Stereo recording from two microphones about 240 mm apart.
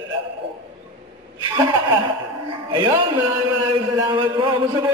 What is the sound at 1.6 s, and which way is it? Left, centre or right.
Speech, centre.